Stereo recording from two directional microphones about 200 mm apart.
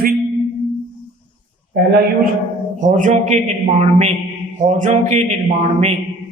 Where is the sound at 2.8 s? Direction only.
40° right (ahead or behind).